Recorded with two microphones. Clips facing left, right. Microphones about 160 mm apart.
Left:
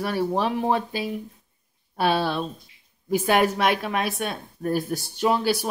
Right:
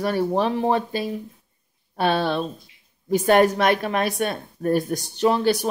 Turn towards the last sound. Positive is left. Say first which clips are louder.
# right 3 dB
turn(degrees=10)  # may be behind; listen again after turning